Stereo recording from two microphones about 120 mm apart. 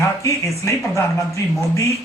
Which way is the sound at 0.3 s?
25° left (ahead or behind).